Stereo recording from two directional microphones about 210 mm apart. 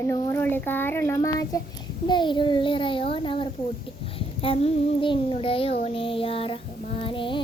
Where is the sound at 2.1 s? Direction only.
20° left (ahead or behind).